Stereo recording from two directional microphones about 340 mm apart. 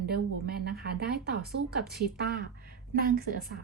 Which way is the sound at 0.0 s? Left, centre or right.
Right.